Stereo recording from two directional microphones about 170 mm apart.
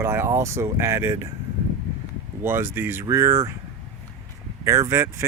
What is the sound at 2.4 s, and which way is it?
Speech, 10° right (ahead or behind).